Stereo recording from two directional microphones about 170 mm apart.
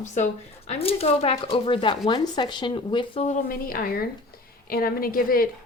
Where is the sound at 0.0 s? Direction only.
45° left (ahead or behind); by 3.2 s 30° left (ahead or behind).